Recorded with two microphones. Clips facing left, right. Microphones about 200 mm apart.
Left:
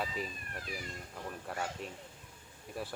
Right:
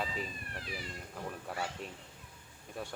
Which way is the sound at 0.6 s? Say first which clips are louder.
Left 1 dB; 45° left (ahead or behind).